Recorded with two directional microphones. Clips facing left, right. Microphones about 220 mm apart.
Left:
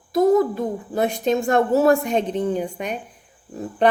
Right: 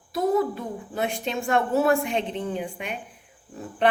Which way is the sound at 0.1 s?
45° left (ahead or behind).